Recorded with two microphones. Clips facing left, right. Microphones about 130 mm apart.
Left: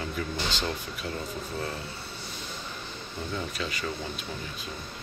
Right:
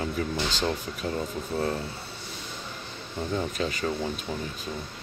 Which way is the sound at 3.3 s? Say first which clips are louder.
Right 5 dB; 40° right (ahead or behind).